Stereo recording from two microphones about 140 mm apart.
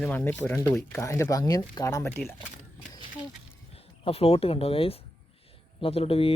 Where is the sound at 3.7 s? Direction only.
45° left (ahead or behind).